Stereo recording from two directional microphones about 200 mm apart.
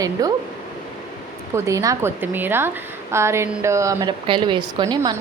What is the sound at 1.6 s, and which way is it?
A woman's voice, 15° right (ahead or behind).